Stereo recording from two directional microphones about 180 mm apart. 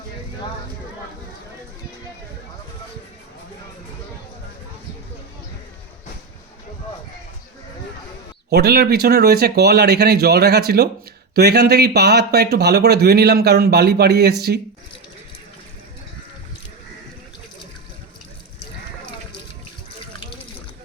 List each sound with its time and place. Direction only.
8.4 s speech: 60° right (ahead or behind)